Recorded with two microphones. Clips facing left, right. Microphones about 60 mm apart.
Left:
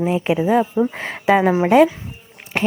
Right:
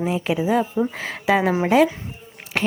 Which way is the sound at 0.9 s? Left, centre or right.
Left.